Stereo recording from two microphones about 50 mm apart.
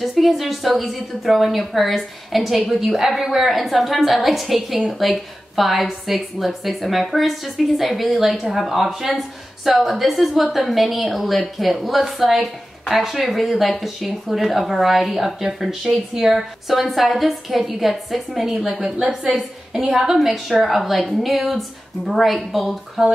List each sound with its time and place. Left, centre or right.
0.0 s a woman's voice: centre
18.8 s a woman's voice: centre
19.3 s a woman's voice: centre